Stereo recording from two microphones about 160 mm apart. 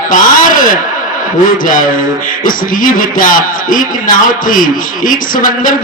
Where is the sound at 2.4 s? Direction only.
55° left (ahead or behind).